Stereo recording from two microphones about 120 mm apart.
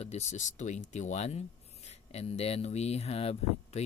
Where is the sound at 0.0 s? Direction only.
70° left (ahead or behind).